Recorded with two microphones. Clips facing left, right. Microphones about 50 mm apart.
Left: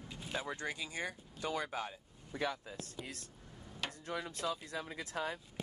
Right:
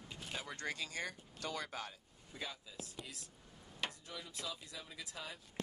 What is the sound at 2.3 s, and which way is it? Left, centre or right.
Speech, left.